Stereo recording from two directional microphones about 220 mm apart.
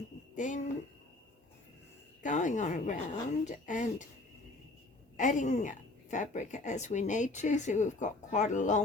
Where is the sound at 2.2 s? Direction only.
35° left (ahead or behind).